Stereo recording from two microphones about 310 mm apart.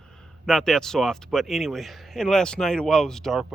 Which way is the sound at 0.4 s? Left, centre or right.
Centre.